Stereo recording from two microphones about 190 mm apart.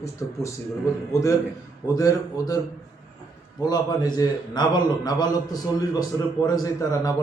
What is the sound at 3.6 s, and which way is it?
A man's voice, 20° left (ahead or behind).